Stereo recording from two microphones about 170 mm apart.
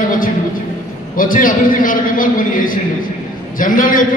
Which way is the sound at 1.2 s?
55° left (ahead or behind).